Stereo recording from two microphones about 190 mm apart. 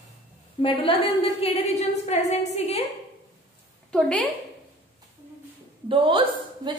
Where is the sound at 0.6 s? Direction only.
30° left (ahead or behind).